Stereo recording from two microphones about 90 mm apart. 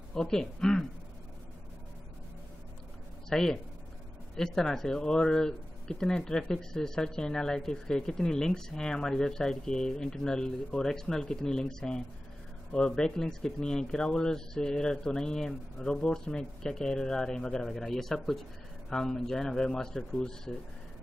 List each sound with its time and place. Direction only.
0.1 s speech: 5° left (ahead or behind)
3.3 s speech: 5° left (ahead or behind)